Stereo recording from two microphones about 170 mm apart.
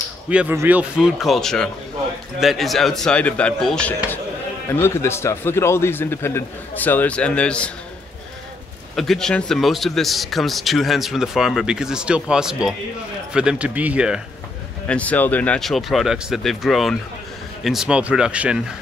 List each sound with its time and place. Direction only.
0.3 s a man's voice: 10° right (ahead or behind); by 7.7 s 5° left (ahead or behind)
8.9 s a man's voice: centre (ahead or behind)
14.9 s a man's voice: 10° left (ahead or behind)